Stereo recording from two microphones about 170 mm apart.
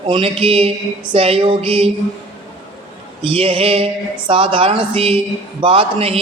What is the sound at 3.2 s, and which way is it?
A man's voice, 35° right (ahead or behind).